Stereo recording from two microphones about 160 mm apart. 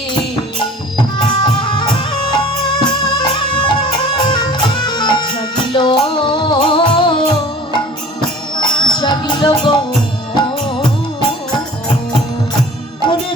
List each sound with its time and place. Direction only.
1.5 s music: 30° left (ahead or behind)
8.5 s music: 30° left (ahead or behind)